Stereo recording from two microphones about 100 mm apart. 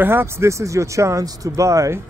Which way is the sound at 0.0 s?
25° right (ahead or behind).